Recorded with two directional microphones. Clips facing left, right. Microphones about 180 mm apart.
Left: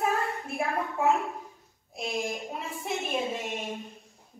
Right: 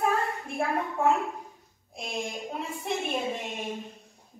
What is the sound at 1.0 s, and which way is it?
A woman's voice, 5° left (ahead or behind).